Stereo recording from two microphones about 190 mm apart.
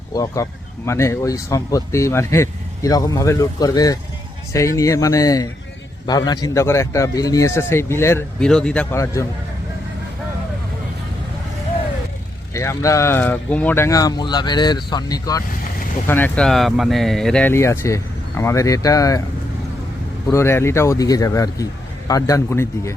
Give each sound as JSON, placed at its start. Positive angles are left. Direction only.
{"t": 0.1, "sound": "a man's voice", "side_deg": 20}
{"t": 12.5, "sound": "speech", "side_deg": 15}
{"t": 20.3, "sound": "speech", "side_deg": 15}